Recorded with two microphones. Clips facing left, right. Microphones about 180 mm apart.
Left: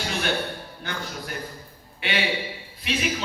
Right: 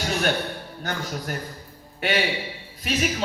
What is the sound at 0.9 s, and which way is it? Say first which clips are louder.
A man's voice: right 4 dB; 45° right (ahead or behind).